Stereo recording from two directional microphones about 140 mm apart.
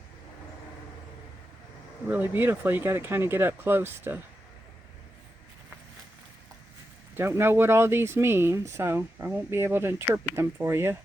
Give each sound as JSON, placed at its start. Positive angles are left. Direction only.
{"t": 2.0, "sound": "speech", "side_deg": -15}
{"t": 7.2, "sound": "speech", "side_deg": -15}